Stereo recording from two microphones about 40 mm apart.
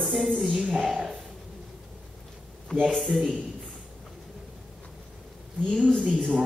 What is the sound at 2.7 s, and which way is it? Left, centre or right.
Speech, centre.